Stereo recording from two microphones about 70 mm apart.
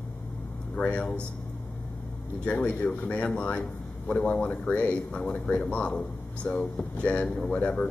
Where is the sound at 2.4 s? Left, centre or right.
Centre.